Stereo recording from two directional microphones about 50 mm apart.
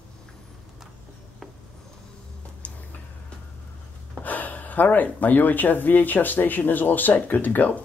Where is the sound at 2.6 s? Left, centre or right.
Left.